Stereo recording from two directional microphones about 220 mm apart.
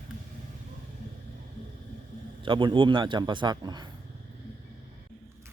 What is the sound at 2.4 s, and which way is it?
A man's voice, 20° right (ahead or behind).